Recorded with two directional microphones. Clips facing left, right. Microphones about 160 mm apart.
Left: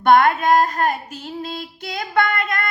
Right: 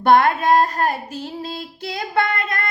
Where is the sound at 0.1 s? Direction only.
30° right (ahead or behind).